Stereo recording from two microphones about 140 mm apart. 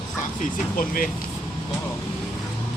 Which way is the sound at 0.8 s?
80° left.